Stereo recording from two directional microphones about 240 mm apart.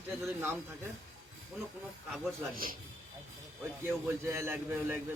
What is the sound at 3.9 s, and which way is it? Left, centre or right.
A man's voice, centre.